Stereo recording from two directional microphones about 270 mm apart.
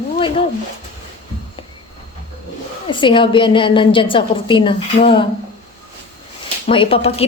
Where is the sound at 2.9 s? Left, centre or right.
Centre.